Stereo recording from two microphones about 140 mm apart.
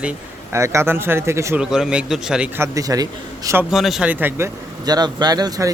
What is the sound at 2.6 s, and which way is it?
Speech, 25° right (ahead or behind).